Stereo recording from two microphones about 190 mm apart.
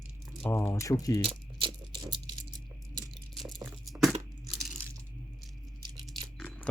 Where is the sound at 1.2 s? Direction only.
25° right (ahead or behind).